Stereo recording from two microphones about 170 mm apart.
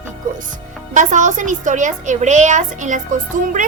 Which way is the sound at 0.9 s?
45° right (ahead or behind).